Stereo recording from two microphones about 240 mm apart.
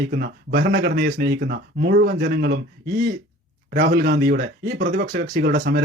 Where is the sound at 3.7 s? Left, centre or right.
Right.